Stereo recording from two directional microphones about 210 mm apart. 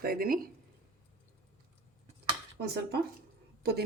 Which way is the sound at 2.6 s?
50° right (ahead or behind).